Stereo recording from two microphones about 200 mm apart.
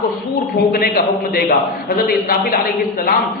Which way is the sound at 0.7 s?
50° left (ahead or behind).